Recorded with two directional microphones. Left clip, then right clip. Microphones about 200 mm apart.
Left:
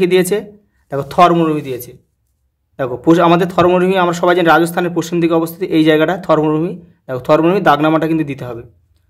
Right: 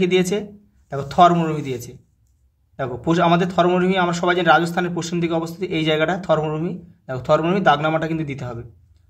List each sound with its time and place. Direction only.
0.0 s a man's voice: 30° left (ahead or behind)